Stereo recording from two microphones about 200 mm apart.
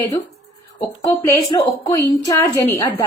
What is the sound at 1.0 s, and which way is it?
A woman's voice, 15° left (ahead or behind).